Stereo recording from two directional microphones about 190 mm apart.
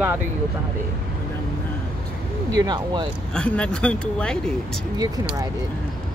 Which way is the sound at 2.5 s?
20° right (ahead or behind).